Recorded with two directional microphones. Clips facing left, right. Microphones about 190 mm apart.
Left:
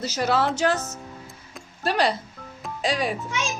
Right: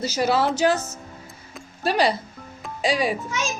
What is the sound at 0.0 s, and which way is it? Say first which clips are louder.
Speech: right 2 dB; 5° right (ahead or behind).